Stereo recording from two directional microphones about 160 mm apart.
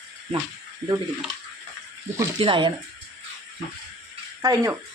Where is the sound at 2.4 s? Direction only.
30° right (ahead or behind).